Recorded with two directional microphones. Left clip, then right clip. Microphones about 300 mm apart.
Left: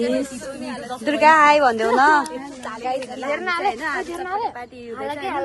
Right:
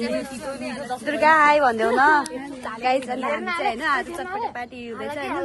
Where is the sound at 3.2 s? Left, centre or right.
Left.